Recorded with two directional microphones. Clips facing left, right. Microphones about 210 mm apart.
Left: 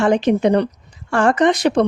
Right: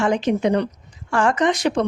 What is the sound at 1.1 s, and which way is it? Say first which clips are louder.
Speech: left 4 dB; 60° left (ahead or behind).